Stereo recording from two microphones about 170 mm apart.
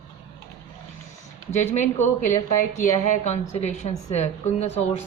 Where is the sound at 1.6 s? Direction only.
40° left (ahead or behind).